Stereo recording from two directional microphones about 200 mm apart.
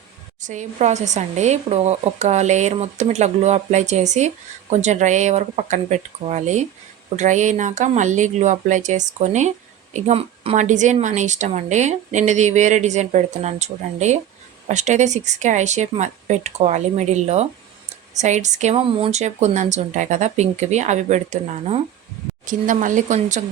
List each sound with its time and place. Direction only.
0.4 s speech: 35° right (ahead or behind)